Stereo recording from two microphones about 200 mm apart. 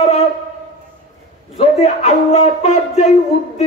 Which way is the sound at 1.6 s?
35° left (ahead or behind).